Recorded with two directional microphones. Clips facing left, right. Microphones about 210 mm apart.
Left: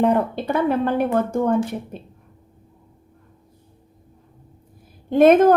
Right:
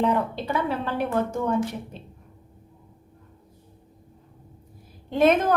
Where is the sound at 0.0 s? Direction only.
50° left (ahead or behind).